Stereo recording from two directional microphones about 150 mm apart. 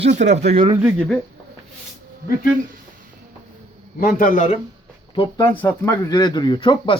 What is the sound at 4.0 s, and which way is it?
Speech, 65° left (ahead or behind).